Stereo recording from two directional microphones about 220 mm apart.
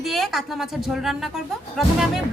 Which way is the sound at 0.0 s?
Centre (ahead or behind).